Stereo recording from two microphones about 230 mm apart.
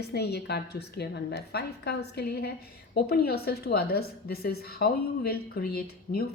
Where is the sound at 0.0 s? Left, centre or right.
Left.